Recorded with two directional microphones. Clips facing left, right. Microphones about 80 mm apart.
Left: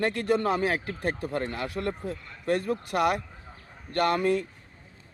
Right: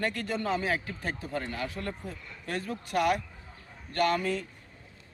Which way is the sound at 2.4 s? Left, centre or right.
Left.